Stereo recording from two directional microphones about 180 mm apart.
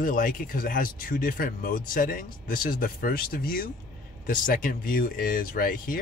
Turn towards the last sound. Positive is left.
turn(degrees=50)  # may be behind; listen again after turning